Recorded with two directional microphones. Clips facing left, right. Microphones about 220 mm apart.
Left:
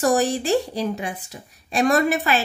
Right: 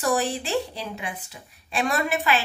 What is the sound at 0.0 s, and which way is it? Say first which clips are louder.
A woman's voice: left 5 dB; 45° left (ahead or behind).